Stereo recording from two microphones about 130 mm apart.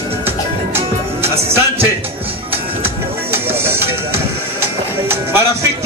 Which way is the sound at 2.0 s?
45° right (ahead or behind).